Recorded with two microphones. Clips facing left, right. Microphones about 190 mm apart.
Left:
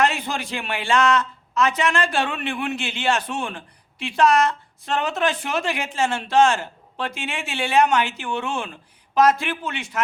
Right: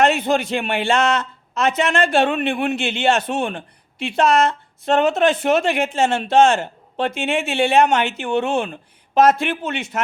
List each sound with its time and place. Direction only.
0.0 s speech: 25° right (ahead or behind)